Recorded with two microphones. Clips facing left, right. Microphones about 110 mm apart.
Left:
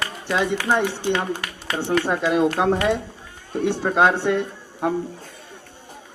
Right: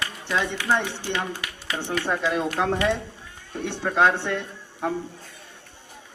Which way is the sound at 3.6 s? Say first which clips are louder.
Left 3 dB; 10° left (ahead or behind).